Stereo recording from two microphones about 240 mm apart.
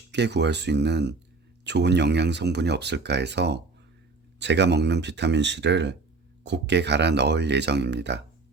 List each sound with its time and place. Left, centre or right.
0.1 s speech: right